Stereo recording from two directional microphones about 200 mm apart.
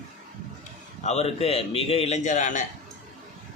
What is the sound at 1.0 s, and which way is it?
Speech, 30° left (ahead or behind).